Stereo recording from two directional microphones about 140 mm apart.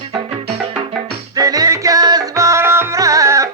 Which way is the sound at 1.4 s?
25° right (ahead or behind).